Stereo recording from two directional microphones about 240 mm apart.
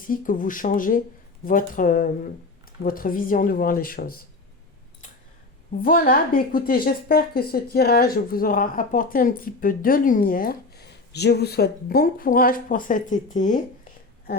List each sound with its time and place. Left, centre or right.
0.0 s speech: left
5.8 s speech: left